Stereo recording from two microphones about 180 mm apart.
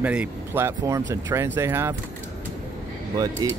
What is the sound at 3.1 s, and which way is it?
Speech, 20° right (ahead or behind).